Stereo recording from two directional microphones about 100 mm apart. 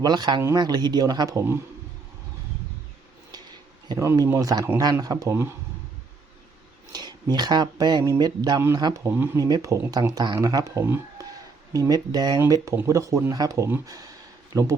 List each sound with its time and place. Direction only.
0.0 s speech: 45° right (ahead or behind)
3.9 s speech: 30° right (ahead or behind)
6.9 s speech: 45° right (ahead or behind)
9.1 s speech: 20° right (ahead or behind)
9.4 s speech: 35° right (ahead or behind)
9.9 s speech: 40° right (ahead or behind)
12.5 s speech: 35° right (ahead or behind)